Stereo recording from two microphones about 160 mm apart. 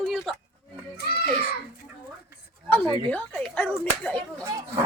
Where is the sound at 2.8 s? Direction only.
30° right (ahead or behind).